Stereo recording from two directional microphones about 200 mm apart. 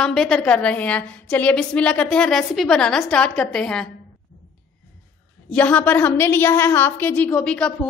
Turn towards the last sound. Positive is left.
turn(degrees=5)  # may be behind; listen again after turning